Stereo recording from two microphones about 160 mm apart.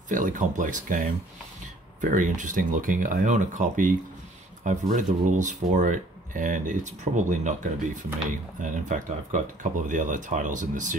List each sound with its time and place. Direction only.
0.1 s speech: 55° right (ahead or behind)